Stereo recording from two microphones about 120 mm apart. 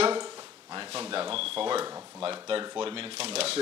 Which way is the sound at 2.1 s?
45° right (ahead or behind).